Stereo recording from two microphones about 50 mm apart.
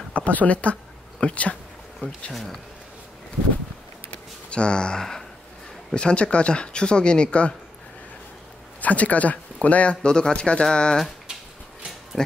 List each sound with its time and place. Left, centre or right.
0.1 s speech: left
2.3 s speech: centre
4.1 s a sound: left
5.9 s speech: left
8.8 s speech: left
10.0 s speech: centre